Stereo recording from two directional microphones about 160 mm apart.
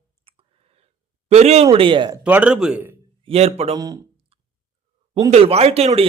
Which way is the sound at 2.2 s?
10° right (ahead or behind).